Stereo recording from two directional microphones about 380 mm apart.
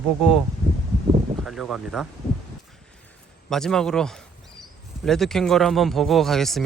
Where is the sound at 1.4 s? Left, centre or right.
Centre.